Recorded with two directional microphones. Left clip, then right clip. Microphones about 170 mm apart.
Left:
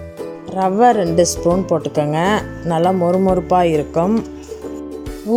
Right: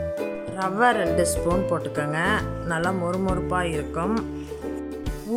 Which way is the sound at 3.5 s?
25° left (ahead or behind).